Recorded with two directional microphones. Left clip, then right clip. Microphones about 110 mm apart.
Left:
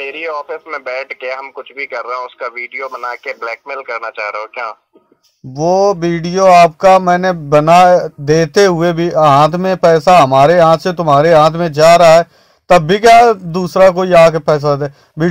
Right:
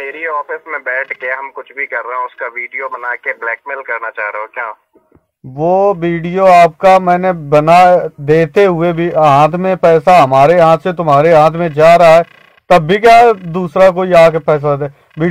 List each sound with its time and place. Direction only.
0.0 s radio: 10° right (ahead or behind)
1.0 s speech: 10° right (ahead or behind)
5.6 s mantra: 55° left (ahead or behind)
6.4 s speech: 35° left (ahead or behind)
8.5 s speech: 45° left (ahead or behind)
13.5 s a man's voice: 45° left (ahead or behind)